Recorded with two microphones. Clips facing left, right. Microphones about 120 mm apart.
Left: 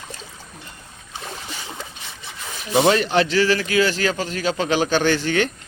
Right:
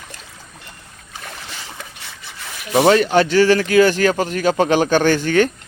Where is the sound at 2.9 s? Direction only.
40° right (ahead or behind).